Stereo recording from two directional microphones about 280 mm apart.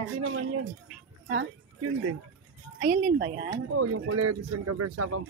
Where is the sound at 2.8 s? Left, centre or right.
Right.